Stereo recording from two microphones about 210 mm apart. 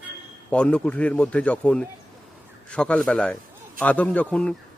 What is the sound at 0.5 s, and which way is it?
A man's voice, 5° left (ahead or behind).